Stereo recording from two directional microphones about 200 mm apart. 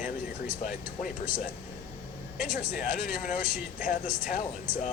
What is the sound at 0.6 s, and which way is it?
Speech, 40° left (ahead or behind).